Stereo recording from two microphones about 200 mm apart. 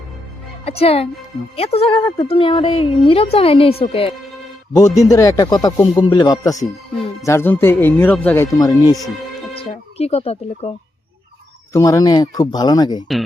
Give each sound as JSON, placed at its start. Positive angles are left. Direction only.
{"t": 0.6, "sound": "a woman's voice", "side_deg": 30}
{"t": 4.7, "sound": "speech", "side_deg": 15}
{"t": 10.0, "sound": "speech", "side_deg": 30}
{"t": 11.7, "sound": "a woman's voice", "side_deg": 15}